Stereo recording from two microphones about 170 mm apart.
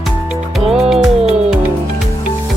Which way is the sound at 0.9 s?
35° right (ahead or behind).